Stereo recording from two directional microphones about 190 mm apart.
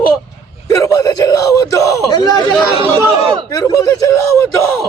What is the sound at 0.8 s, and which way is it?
Yell, 20° left (ahead or behind).